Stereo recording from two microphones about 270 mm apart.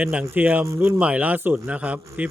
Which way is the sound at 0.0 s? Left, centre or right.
Centre.